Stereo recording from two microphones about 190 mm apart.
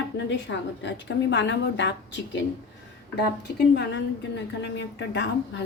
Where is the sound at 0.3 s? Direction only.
70° left (ahead or behind).